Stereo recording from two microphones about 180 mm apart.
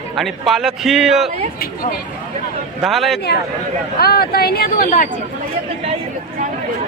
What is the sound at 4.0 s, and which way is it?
Speech, 60° left (ahead or behind).